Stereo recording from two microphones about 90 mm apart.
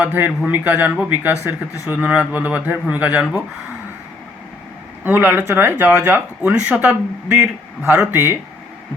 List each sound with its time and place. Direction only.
0.0 s speech: 20° right (ahead or behind)
5.0 s speech: 25° right (ahead or behind)